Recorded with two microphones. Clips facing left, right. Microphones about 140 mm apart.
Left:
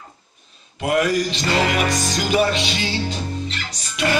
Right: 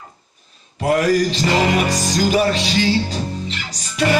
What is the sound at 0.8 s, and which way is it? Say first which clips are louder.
Music: right 3 dB; 35° right (ahead or behind).